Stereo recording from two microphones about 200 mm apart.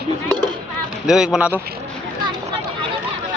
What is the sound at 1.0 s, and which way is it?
Speech, 5° right (ahead or behind).